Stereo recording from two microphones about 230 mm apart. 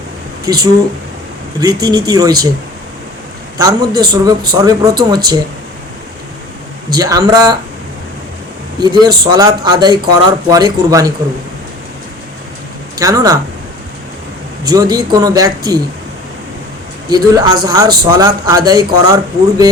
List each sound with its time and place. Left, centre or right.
0.4 s a man's voice: centre
3.6 s a man's voice: centre
6.9 s a man's voice: centre
8.8 s a man's voice: centre
13.0 s a man's voice: centre
14.7 s a man's voice: centre
17.1 s a man's voice: centre